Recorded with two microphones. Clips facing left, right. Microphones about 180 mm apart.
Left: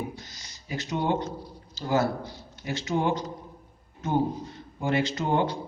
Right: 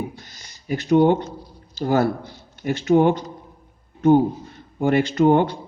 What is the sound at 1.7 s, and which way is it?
Speech, 55° right (ahead or behind).